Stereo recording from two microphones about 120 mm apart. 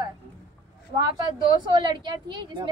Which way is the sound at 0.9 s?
40° right (ahead or behind).